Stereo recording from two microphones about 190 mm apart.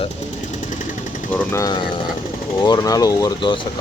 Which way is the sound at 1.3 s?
10° left (ahead or behind).